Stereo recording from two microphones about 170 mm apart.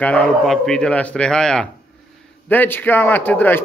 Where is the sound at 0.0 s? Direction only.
5° left (ahead or behind).